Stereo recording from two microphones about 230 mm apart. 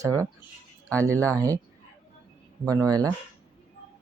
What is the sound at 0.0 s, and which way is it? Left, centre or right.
Speech, centre.